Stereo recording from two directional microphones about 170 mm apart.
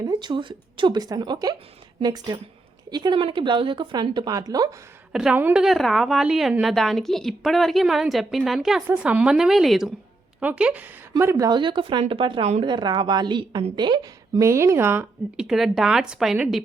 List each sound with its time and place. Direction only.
0.0 s a woman's voice: 25° right (ahead or behind)
5.1 s a woman's voice: 5° right (ahead or behind)
11.1 s a woman's voice: 20° right (ahead or behind)
15.4 s a woman's voice: centre (ahead or behind)